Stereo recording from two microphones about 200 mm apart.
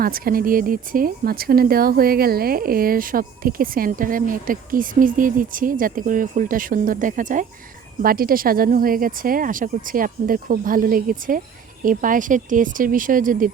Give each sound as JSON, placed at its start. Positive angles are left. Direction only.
{"t": 0.0, "sound": "speech", "side_deg": -45}